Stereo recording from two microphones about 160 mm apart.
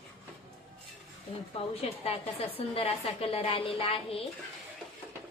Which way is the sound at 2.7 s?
35° left (ahead or behind).